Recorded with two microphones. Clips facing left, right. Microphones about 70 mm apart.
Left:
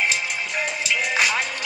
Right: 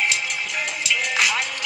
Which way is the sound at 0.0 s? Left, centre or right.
Centre.